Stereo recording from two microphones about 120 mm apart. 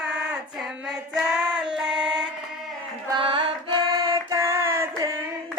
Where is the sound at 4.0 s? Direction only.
25° right (ahead or behind).